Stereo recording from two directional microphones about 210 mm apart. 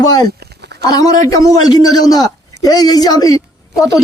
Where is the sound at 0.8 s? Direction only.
15° left (ahead or behind).